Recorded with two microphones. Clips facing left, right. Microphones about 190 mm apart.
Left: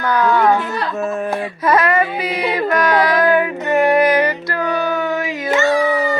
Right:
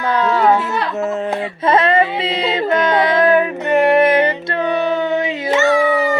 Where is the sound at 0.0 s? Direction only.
25° right (ahead or behind).